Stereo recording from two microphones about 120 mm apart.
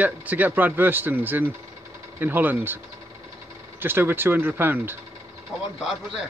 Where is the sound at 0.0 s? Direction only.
15° right (ahead or behind).